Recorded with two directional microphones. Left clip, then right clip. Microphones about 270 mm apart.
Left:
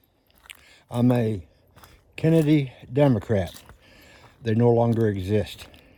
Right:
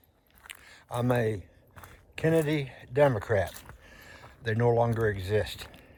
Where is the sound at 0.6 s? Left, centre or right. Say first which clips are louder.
Left 6 dB; left.